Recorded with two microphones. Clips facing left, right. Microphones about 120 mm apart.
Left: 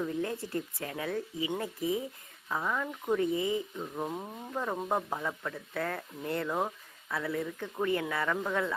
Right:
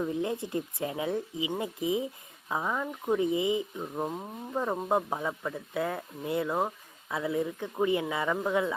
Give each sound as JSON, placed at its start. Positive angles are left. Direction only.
{"t": 0.0, "sound": "speech", "side_deg": -15}